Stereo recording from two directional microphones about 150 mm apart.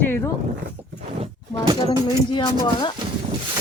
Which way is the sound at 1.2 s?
30° right (ahead or behind).